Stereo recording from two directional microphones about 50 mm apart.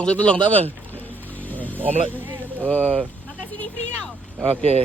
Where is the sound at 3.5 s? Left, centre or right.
Left.